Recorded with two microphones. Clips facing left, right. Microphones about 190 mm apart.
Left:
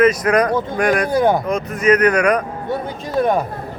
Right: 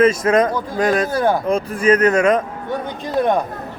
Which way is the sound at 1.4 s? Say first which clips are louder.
Right 1 dB; 30° right (ahead or behind).